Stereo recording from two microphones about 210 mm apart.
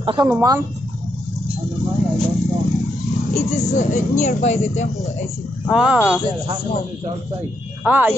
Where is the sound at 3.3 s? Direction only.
30° left (ahead or behind).